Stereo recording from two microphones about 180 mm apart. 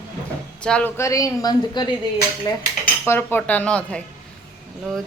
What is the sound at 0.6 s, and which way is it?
Speech, 5° left (ahead or behind).